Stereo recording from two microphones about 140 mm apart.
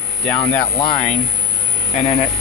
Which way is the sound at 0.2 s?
10° left (ahead or behind).